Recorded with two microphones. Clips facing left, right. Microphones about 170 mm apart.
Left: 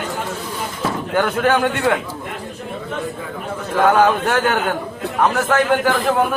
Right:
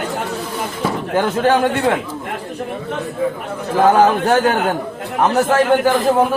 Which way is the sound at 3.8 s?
30° right (ahead or behind).